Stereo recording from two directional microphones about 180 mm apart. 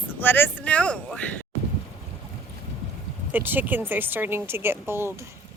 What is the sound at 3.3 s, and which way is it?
Speech, 10° right (ahead or behind).